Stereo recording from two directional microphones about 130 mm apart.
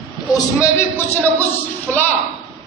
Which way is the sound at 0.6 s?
20° left (ahead or behind).